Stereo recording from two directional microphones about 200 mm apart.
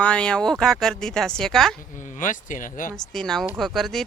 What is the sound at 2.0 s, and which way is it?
Speech, 40° left (ahead or behind).